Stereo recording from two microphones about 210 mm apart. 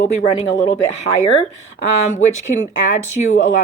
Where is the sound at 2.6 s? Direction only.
35° left (ahead or behind).